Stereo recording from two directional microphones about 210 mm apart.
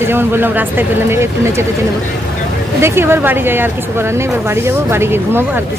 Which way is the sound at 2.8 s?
10° right (ahead or behind).